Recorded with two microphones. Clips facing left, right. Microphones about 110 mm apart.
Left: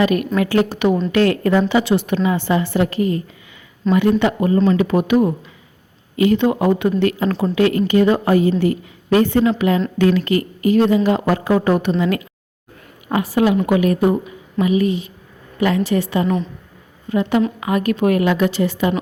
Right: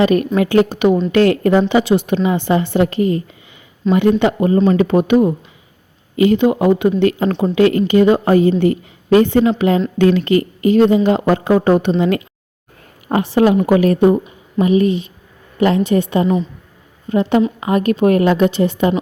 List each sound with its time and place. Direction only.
0.0 s a woman's voice: 35° right (ahead or behind)
3.9 s speech: centre (ahead or behind)
4.2 s a woman's voice: 25° right (ahead or behind)